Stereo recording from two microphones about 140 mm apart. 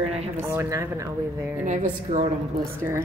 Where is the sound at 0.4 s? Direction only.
20° right (ahead or behind).